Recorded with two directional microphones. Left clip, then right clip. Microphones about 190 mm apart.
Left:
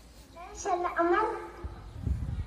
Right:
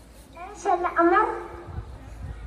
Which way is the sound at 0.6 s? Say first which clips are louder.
Right 7 dB; 25° left (ahead or behind).